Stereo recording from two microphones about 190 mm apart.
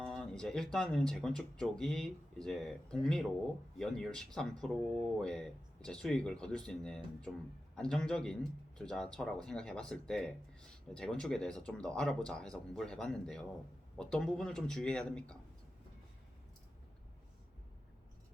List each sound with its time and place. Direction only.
0.0 s speech: 5° left (ahead or behind)